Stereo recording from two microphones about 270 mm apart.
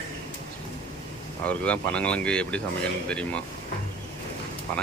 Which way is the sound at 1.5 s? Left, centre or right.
Centre.